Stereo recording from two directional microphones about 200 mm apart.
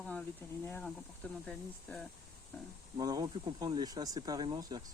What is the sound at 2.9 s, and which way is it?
Speech, 20° right (ahead or behind).